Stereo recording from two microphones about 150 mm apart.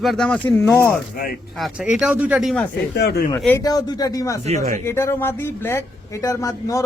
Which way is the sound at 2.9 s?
90° left.